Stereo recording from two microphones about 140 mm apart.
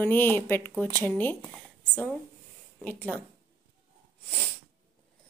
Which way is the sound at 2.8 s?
10° left (ahead or behind).